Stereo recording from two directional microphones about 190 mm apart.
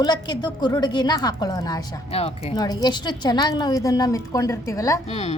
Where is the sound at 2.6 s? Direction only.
20° left (ahead or behind).